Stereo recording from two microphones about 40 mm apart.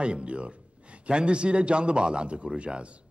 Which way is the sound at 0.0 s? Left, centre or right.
Right.